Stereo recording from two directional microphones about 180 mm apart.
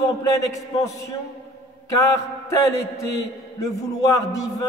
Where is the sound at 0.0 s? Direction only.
20° left (ahead or behind).